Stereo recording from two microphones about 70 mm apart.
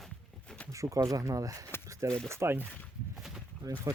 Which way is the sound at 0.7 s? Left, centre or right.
Right.